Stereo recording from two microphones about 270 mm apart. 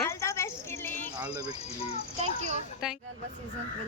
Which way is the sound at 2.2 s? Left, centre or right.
Right.